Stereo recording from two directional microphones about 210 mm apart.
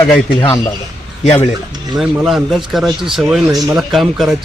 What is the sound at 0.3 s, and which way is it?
Speech, 20° left (ahead or behind).